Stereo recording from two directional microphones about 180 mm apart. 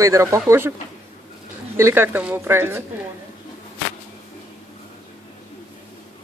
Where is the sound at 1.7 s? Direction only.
15° right (ahead or behind).